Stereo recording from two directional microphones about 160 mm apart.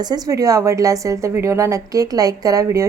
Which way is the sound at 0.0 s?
25° right (ahead or behind).